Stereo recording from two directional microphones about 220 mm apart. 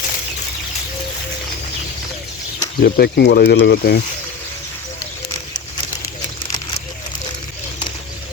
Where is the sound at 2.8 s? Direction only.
45° left (ahead or behind).